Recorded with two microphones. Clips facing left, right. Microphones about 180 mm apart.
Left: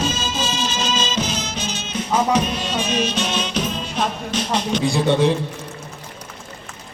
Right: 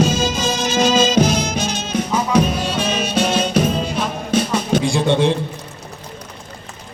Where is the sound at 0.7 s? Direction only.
10° right (ahead or behind).